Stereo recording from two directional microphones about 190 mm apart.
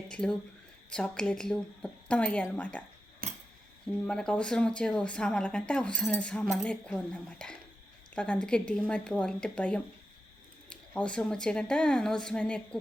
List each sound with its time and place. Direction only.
0.1 s speech: 5° left (ahead or behind)
3.2 s scissors: 50° right (ahead or behind)
4.0 s speech: 5° left (ahead or behind)